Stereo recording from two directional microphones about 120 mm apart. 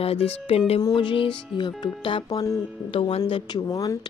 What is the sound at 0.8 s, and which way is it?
Speech, 45° left (ahead or behind).